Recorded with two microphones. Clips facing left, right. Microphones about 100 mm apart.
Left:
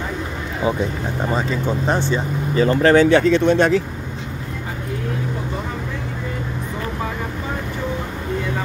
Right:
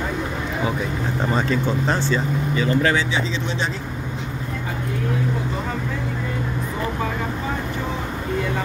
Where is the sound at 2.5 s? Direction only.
40° left (ahead or behind); by 3.7 s 60° left (ahead or behind).